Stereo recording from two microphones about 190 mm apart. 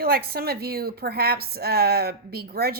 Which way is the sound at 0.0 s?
55° right (ahead or behind).